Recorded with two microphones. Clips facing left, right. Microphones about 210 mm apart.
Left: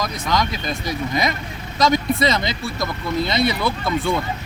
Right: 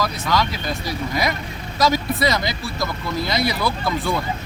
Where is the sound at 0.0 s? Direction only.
20° left (ahead or behind).